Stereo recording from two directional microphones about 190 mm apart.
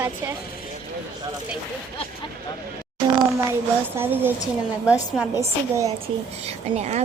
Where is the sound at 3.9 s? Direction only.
10° right (ahead or behind).